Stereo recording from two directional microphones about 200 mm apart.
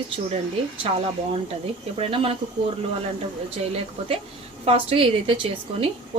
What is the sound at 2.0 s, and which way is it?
Speech, 25° right (ahead or behind).